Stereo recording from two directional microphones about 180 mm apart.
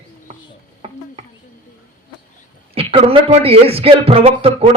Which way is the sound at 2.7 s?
30° right (ahead or behind).